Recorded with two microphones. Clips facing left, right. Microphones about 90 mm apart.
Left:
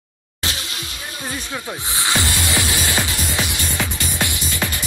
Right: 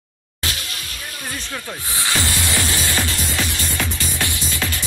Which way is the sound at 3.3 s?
20° left (ahead or behind).